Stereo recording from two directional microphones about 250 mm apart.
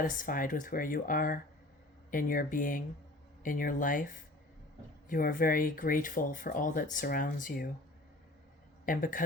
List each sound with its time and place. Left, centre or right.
0.0 s speech: left
8.9 s speech: left